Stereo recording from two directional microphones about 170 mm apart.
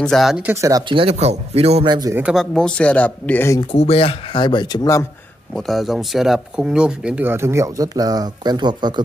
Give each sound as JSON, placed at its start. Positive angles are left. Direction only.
{"t": 0.0, "sound": "speech", "side_deg": 0}
{"t": 0.9, "sound": "speech", "side_deg": -35}
{"t": 2.0, "sound": "speech", "side_deg": -20}
{"t": 2.2, "sound": "speech", "side_deg": 5}
{"t": 3.7, "sound": "speech", "side_deg": 35}
{"t": 5.5, "sound": "speech", "side_deg": 0}